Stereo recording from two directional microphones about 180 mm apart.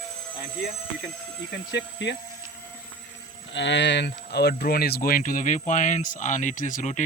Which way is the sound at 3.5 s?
80° left.